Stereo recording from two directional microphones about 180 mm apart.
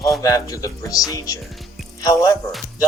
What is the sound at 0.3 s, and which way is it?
Speech, 20° left (ahead or behind).